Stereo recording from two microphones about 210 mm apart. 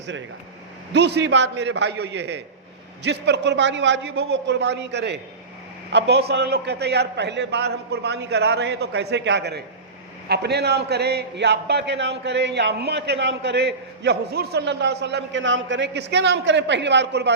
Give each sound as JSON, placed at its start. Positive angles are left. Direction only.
{"t": 0.9, "sound": "a man's voice", "side_deg": -55}